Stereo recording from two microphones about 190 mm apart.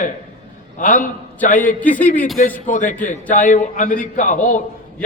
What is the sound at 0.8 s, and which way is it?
A man's voice, 45° left (ahead or behind).